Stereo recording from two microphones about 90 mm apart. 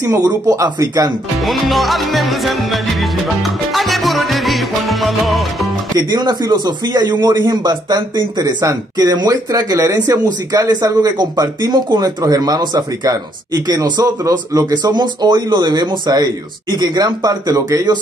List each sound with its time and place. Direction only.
0.0 s speech: 40° right (ahead or behind)
1.4 s music: centre (ahead or behind)
5.9 s speech: 55° right (ahead or behind)